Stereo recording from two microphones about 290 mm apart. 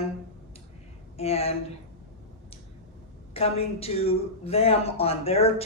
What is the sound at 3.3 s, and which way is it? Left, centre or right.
Speech, left.